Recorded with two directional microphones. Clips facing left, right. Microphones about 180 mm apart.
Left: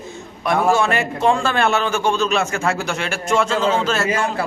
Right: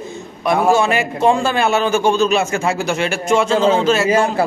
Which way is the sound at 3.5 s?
30° right (ahead or behind).